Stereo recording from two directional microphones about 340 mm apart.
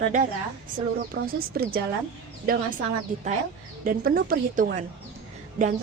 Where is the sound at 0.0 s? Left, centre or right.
Right.